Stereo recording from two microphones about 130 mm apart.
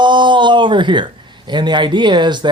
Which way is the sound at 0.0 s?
35° right (ahead or behind).